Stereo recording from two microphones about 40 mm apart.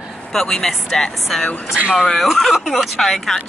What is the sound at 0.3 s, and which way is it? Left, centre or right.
Speech, centre.